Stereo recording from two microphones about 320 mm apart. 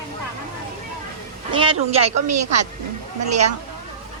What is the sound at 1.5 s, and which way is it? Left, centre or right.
Speech, centre.